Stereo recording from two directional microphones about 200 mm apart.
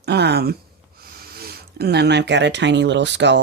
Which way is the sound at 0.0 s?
55° right (ahead or behind).